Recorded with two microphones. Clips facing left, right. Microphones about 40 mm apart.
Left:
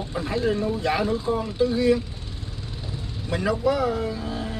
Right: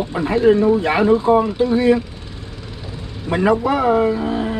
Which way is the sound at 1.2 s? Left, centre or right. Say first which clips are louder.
Right 9 dB; right.